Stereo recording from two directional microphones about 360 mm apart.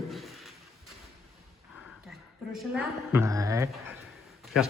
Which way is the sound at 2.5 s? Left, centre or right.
Centre.